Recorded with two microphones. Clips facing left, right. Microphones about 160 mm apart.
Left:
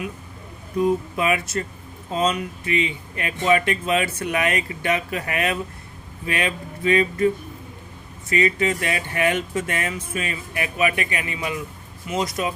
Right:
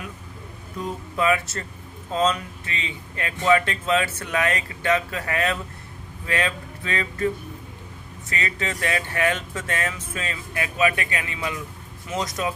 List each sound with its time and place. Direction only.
0.8 s speech: 15° left (ahead or behind)
8.3 s speech: 15° left (ahead or behind)